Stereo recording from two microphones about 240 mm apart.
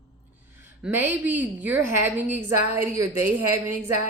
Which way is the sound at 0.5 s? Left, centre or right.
Centre.